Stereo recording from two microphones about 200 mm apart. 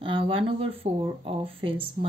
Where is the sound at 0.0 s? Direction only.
25° right (ahead or behind).